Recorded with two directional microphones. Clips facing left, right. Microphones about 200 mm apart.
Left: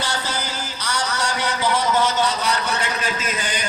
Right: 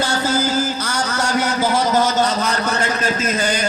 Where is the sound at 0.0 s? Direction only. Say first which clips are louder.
Right 8 dB; 45° right (ahead or behind).